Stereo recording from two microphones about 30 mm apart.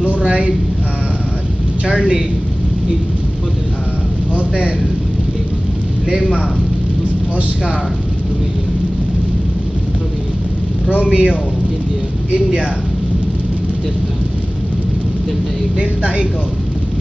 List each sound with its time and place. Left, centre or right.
0.2 s a sound: right
1.9 s a man's voice: right
4.4 s speech: right
11.0 s speech: right
15.8 s speech: right